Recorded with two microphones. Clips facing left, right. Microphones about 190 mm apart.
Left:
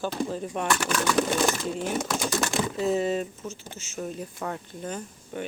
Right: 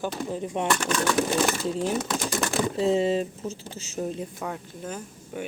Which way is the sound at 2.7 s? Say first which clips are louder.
Right 3 dB; 25° right (ahead or behind).